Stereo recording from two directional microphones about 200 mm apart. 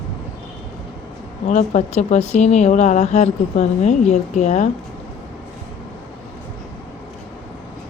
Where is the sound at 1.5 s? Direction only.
35° left (ahead or behind).